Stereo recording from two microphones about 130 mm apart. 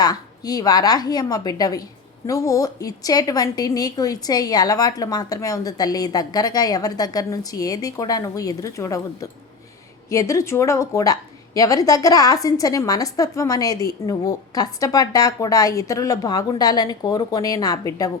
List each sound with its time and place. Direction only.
0.0 s a woman's voice: 30° left (ahead or behind)